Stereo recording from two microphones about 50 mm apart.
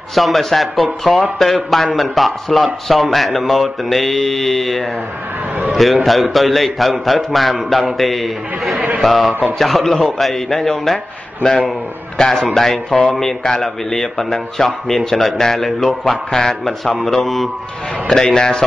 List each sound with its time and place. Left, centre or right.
0.1 s speech: centre
6.0 s speech: centre
9.3 s speech: right
9.6 s speech: centre
11.4 s speech: centre
12.2 s speech: centre